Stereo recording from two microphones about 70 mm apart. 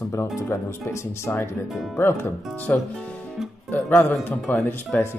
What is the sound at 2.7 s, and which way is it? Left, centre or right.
Speech, left.